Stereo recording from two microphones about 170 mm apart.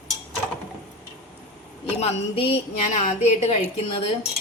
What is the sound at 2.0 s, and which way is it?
A woman's voice, 35° left (ahead or behind).